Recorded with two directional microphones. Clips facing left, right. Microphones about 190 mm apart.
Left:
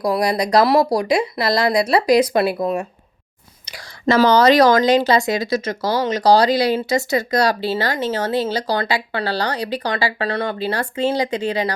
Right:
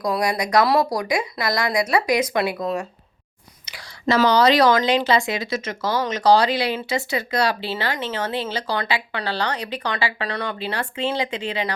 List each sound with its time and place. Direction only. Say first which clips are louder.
0.0 s a woman's voice: left 4 dB; 30° left (ahead or behind)
3.7 s a woman's voice: left 3 dB; 40° left (ahead or behind)